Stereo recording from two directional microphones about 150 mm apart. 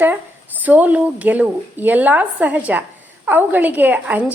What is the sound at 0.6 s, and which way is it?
A woman's voice, 10° right (ahead or behind).